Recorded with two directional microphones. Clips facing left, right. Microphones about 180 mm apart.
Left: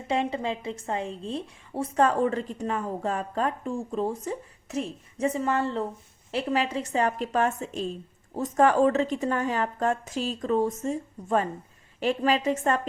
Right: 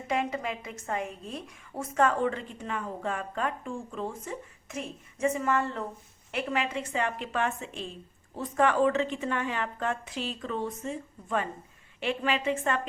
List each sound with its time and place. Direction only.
0.1 s a woman's voice: 30° left (ahead or behind)